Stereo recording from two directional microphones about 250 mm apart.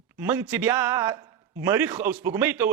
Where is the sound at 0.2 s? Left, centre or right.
Centre.